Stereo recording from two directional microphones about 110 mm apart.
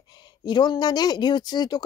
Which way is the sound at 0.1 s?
40° left (ahead or behind).